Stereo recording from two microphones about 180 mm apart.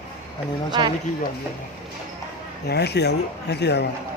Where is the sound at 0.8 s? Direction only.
25° right (ahead or behind).